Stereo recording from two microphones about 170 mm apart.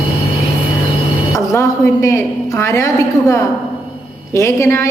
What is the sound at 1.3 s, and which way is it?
A woman's voice, 20° left (ahead or behind).